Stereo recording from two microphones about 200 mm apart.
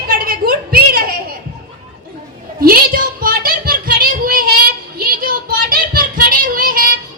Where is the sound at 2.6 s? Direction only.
45° right (ahead or behind).